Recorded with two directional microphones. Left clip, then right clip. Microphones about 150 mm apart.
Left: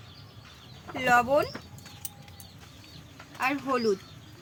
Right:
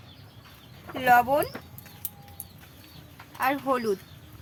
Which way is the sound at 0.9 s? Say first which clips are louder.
Right 3 dB; 25° right (ahead or behind).